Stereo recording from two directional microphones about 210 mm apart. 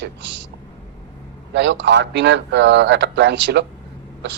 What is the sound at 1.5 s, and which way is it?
Speech, 55° right (ahead or behind).